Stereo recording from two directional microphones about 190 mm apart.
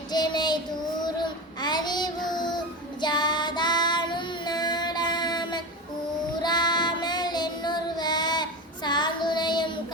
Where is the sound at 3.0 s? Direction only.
20° left (ahead or behind).